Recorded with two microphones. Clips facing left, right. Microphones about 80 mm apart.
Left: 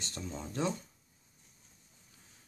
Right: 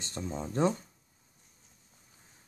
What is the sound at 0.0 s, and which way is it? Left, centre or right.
Speech, right.